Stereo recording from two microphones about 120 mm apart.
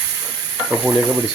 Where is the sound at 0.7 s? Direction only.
15° right (ahead or behind).